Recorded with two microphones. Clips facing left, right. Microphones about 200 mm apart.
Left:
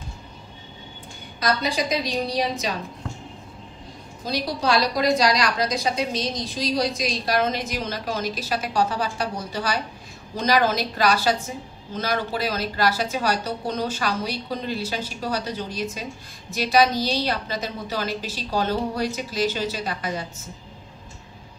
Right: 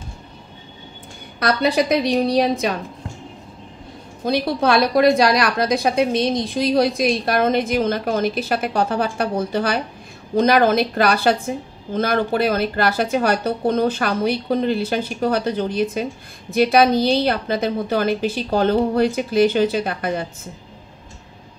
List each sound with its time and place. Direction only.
1.4 s a woman's voice: 60° right (ahead or behind)
4.2 s a woman's voice: 55° right (ahead or behind)